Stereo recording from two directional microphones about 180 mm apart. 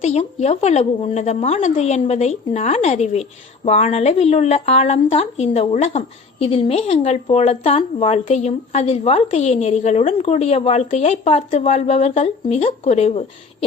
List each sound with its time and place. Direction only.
0.0 s a woman's voice: 35° left (ahead or behind)